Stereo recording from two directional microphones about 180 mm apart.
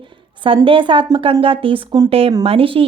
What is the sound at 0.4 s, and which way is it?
Speech, 30° right (ahead or behind).